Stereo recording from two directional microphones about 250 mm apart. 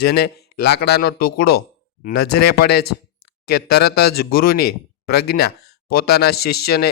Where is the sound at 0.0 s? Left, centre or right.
Left.